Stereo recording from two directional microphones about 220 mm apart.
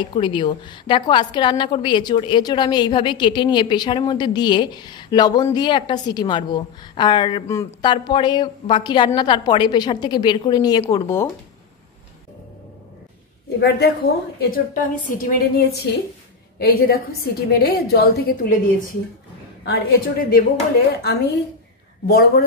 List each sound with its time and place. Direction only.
0.0 s a woman's voice: 20° left (ahead or behind)
13.6 s a woman's voice: 45° left (ahead or behind)